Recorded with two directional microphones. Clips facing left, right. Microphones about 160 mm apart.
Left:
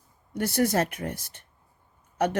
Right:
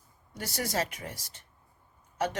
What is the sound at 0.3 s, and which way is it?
Speech, 55° left (ahead or behind).